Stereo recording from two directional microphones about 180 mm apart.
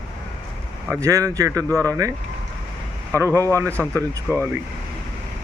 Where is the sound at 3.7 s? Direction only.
10° left (ahead or behind).